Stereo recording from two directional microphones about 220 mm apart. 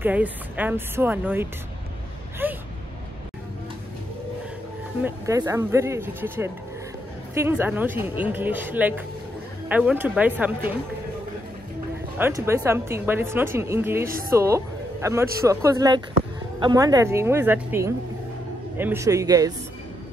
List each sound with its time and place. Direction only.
0.0 s a woman's voice: 5° right (ahead or behind)
2.4 s a sound: 10° right (ahead or behind)
5.0 s a woman's voice: 15° right (ahead or behind)
12.2 s a woman's voice: 15° right (ahead or behind)
14.0 s a woman's voice: 40° right (ahead or behind)
14.3 s a woman's voice: 10° right (ahead or behind)